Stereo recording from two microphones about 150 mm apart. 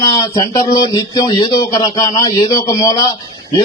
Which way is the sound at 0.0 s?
20° left (ahead or behind).